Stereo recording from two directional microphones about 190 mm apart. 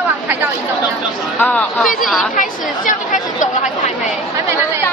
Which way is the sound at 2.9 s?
40° left (ahead or behind).